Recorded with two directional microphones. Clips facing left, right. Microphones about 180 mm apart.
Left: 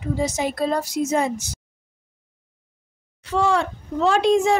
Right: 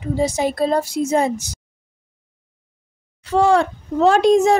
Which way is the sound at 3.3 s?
45° right (ahead or behind).